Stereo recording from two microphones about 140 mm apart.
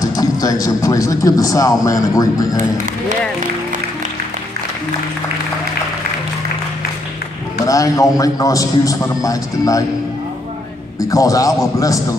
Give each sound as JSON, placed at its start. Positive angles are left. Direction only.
{"t": 0.0, "sound": "a man's voice", "side_deg": 25}
{"t": 7.6, "sound": "a man's voice", "side_deg": 25}
{"t": 11.0, "sound": "a man's voice", "side_deg": 25}